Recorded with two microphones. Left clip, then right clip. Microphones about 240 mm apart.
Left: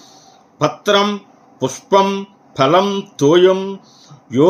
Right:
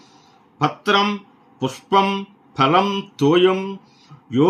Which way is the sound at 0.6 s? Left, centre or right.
Centre.